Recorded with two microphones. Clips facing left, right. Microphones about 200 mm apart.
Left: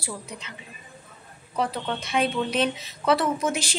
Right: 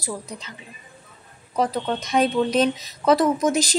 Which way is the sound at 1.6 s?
40° right (ahead or behind).